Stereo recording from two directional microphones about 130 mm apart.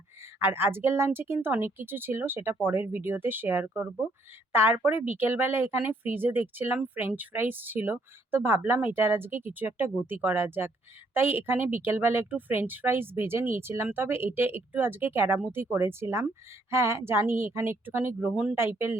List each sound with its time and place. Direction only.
0.3 s a woman's voice: 20° right (ahead or behind)